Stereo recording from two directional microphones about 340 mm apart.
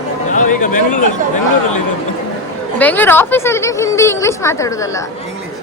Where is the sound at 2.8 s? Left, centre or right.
Centre.